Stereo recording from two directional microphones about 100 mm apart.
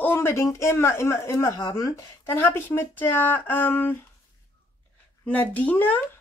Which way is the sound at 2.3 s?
20° left (ahead or behind).